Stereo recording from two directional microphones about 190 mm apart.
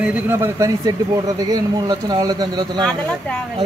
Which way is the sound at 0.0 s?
10° right (ahead or behind).